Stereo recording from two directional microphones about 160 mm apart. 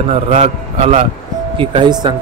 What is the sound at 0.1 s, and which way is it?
A man's voice, 40° right (ahead or behind).